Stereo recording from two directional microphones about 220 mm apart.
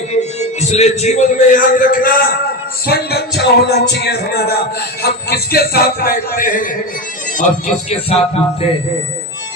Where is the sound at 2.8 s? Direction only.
45° left (ahead or behind).